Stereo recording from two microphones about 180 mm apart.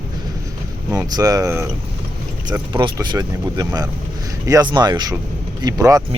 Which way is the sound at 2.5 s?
25° right (ahead or behind).